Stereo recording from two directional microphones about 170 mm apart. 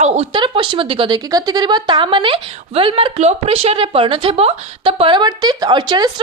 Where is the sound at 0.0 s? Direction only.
35° right (ahead or behind).